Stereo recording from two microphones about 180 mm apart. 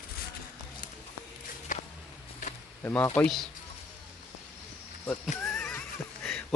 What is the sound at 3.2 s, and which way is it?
Speech, centre (ahead or behind).